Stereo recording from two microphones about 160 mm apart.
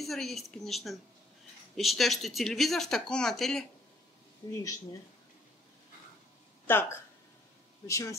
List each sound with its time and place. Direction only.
0.0 s speech: centre (ahead or behind)
4.4 s speech: 20° left (ahead or behind)
6.7 s speech: 15° left (ahead or behind)